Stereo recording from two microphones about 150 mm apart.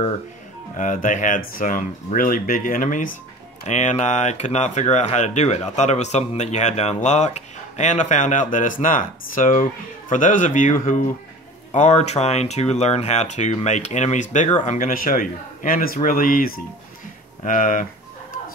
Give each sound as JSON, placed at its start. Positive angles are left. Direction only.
{"t": 0.7, "sound": "a man's voice", "side_deg": 60}
{"t": 3.6, "sound": "a man's voice", "side_deg": 50}